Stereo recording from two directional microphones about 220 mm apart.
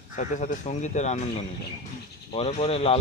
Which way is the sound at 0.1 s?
35° left (ahead or behind).